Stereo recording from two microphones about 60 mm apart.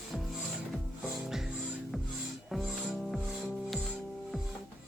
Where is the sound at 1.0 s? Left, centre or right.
Centre.